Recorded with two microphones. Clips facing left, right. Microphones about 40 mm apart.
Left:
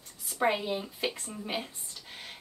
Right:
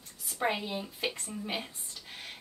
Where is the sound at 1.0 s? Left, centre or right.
Centre.